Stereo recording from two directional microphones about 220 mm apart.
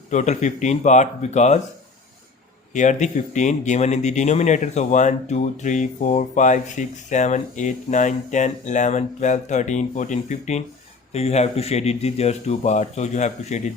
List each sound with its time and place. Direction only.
0.1 s speech: 35° left (ahead or behind)
2.7 s speech: 35° left (ahead or behind)